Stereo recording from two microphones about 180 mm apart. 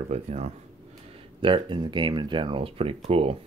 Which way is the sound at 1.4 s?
25° right (ahead or behind).